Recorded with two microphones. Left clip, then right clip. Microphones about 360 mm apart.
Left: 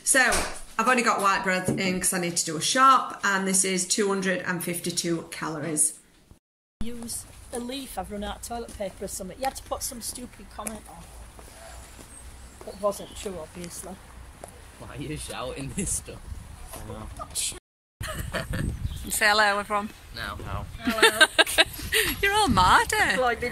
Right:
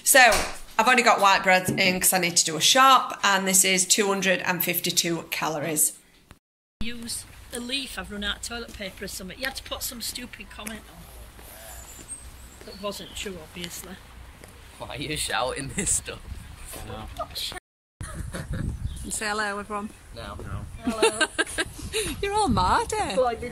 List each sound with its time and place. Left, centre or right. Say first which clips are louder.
0.0 s speech: right 5 dB; centre
6.8 s speech: right 3 dB; centre
12.9 s speech: right 1 dB; centre
14.9 s speech: right 7 dB; centre
17.3 s a sound: right 1 dB; centre
19.0 s speech: left 7 dB; centre